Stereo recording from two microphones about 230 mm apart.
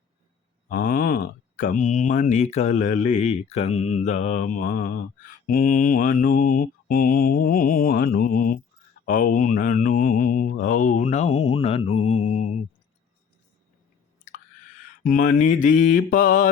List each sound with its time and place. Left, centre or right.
0.7 s speech: left
15.0 s speech: left